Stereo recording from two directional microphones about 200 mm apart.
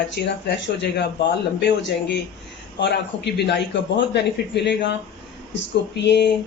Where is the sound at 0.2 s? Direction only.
60° left (ahead or behind).